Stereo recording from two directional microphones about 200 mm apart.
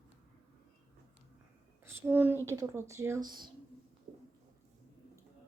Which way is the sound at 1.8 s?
10° right (ahead or behind).